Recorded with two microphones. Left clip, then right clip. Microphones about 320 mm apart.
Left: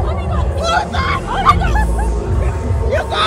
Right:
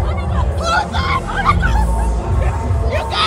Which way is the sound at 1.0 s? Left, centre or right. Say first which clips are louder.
Left 2 dB; centre.